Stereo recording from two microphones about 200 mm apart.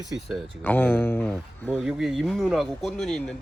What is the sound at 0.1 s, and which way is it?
Speech, centre (ahead or behind).